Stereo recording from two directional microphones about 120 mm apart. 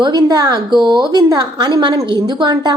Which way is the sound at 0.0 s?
35° right (ahead or behind).